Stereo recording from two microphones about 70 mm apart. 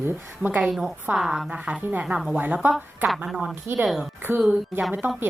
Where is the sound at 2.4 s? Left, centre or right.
Right.